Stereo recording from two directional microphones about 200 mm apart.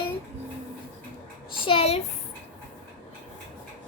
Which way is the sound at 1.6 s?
30° left (ahead or behind).